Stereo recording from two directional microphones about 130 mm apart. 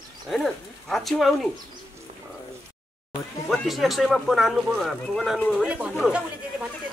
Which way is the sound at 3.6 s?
Centre (ahead or behind).